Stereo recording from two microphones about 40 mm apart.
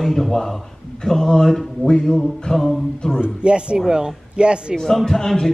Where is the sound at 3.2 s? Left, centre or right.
Right.